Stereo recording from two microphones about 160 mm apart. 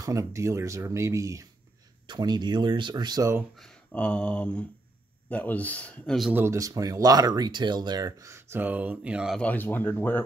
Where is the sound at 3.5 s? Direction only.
5° left (ahead or behind).